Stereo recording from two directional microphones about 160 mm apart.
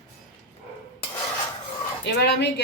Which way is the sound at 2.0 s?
90° left.